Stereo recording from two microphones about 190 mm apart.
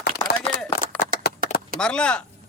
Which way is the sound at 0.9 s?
5° left (ahead or behind).